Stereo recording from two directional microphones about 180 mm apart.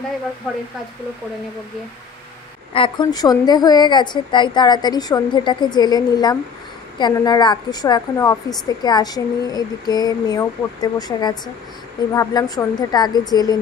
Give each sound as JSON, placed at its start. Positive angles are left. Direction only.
{"t": 2.7, "sound": "a woman's voice", "side_deg": 25}